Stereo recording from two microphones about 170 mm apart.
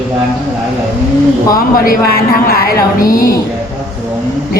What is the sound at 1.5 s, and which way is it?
Speech, 55° left (ahead or behind).